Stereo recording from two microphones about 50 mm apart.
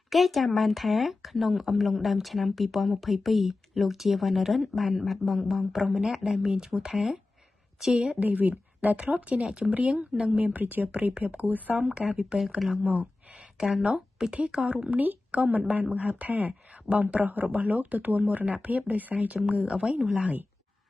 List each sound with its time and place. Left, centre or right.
0.1 s speech: centre
8.2 s speech: right
12.1 s speech: right
12.5 s speech: centre
12.8 s speech: right
13.6 s speech: centre
13.8 s speech: centre